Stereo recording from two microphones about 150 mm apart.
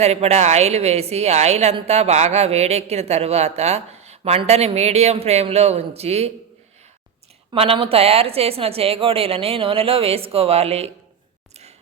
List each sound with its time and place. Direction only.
0.0 s speech: 45° right (ahead or behind)
7.5 s a woman's voice: 40° right (ahead or behind)